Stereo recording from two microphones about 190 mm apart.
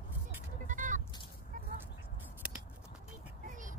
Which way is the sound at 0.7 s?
40° right (ahead or behind).